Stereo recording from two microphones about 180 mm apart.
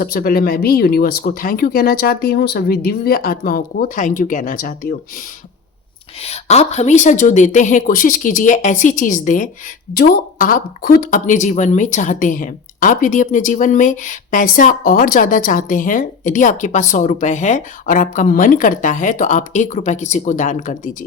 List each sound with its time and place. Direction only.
0.0 s speech: 55° left (ahead or behind)
6.2 s speech: 35° left (ahead or behind)